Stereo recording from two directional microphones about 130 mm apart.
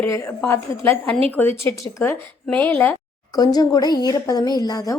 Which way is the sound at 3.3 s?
30° left (ahead or behind).